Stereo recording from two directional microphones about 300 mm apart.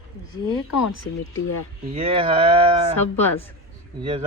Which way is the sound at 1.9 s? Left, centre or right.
Centre.